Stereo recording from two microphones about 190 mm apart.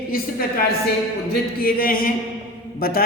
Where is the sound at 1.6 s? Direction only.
50° left (ahead or behind).